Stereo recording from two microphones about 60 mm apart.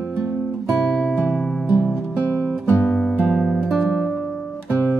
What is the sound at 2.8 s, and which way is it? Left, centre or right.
Music, centre.